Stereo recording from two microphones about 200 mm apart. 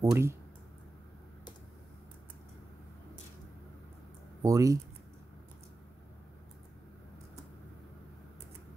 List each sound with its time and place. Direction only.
0.0 s speech: 15° right (ahead or behind)
4.4 s speech: 15° right (ahead or behind)